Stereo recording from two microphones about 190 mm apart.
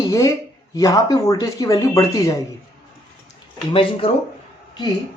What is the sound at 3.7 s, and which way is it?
Speech, 30° left (ahead or behind).